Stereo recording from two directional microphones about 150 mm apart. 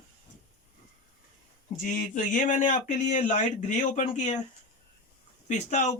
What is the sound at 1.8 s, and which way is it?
Speech, 60° left (ahead or behind).